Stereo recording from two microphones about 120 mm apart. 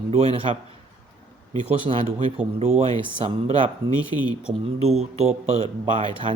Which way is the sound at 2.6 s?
60° right (ahead or behind).